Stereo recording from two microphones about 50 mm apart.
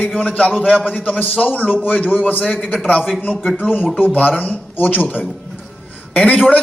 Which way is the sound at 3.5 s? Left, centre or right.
Left.